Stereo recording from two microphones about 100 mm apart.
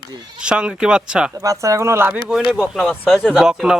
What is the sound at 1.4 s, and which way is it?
Speech, 30° right (ahead or behind).